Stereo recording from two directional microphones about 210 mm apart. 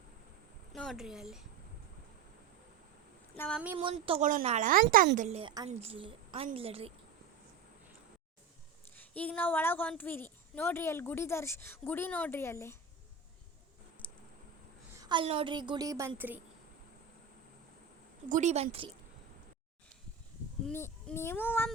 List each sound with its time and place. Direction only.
0.7 s speech: centre (ahead or behind)
3.3 s speech: 10° left (ahead or behind)
3.8 s a woman's voice: 25° right (ahead or behind)
9.0 s speech: 5° left (ahead or behind)
14.0 s a sound: 5° left (ahead or behind)
14.9 s a woman's voice: 20° right (ahead or behind)
18.3 s speech: 35° right (ahead or behind)
20.7 s speech: 10° left (ahead or behind)